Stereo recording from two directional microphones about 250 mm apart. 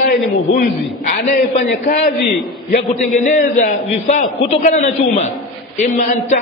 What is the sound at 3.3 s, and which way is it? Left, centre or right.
A man's voice, left.